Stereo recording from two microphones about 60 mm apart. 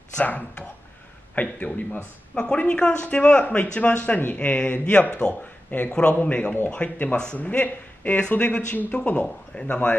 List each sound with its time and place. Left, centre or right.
0.2 s speech: left